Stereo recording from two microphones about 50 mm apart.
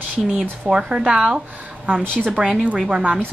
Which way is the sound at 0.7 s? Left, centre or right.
Centre.